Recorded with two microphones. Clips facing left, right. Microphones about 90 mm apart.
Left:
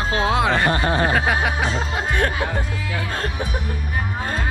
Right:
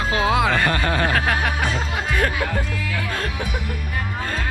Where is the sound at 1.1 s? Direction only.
5° left (ahead or behind).